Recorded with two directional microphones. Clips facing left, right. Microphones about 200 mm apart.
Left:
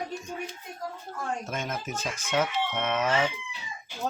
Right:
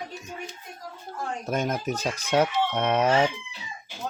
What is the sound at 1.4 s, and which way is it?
Speech, 40° right (ahead or behind).